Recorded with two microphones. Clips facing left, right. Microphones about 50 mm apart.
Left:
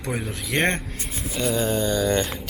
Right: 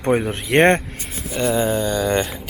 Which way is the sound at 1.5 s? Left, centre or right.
Centre.